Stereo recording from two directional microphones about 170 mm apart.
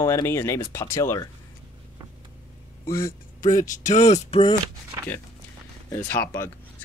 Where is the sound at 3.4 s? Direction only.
50° left (ahead or behind); by 4.5 s 30° left (ahead or behind).